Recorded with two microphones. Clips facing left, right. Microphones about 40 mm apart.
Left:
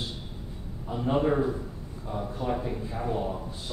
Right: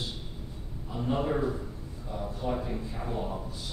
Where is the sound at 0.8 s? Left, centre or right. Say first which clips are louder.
Left 4 dB; centre.